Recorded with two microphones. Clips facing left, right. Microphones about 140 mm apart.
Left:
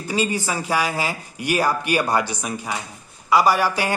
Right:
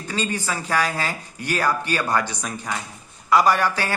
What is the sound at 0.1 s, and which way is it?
A man's voice, 10° left (ahead or behind).